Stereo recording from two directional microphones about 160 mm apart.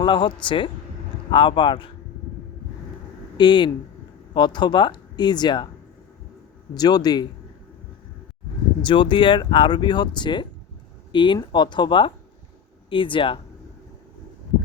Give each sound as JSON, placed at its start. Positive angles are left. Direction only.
{"t": 0.0, "sound": "speech", "side_deg": 30}
{"t": 3.3, "sound": "speech", "side_deg": 30}
{"t": 6.7, "sound": "speech", "side_deg": 25}
{"t": 8.8, "sound": "speech", "side_deg": 30}